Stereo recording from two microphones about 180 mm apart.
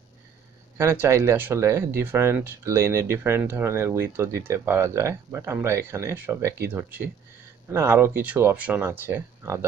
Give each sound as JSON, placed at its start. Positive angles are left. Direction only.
{"t": 0.7, "sound": "speech", "side_deg": -15}